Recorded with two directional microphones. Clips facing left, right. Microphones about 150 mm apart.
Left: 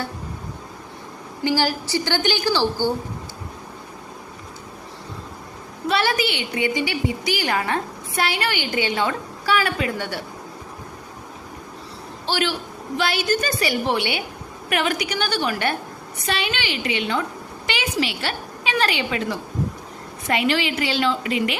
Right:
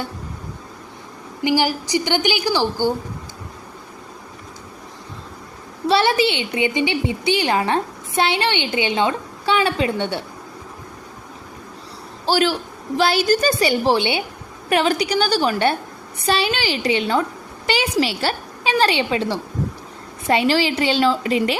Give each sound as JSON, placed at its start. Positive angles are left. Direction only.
{"t": 1.5, "sound": "a woman's voice", "side_deg": -15}
{"t": 5.9, "sound": "a woman's voice", "side_deg": -25}
{"t": 12.2, "sound": "a man's voice", "side_deg": -40}